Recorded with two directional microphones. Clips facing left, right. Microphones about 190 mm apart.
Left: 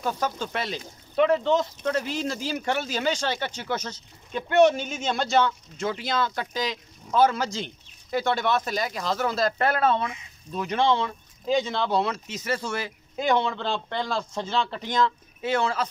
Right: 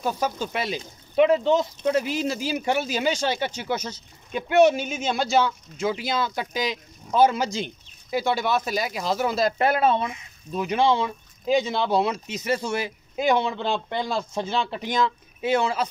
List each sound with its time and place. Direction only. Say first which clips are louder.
0.0 s speech: right 2 dB; 10° right (ahead or behind)